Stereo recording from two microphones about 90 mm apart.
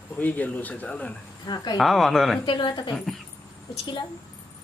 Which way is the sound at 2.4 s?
65° left (ahead or behind).